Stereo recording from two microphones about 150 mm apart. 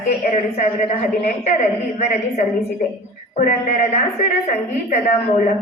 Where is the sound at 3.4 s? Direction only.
55° left (ahead or behind).